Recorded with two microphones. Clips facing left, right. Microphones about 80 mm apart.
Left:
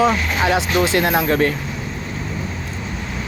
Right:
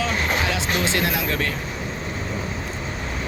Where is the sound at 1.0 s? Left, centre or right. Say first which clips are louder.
Left 7 dB; left.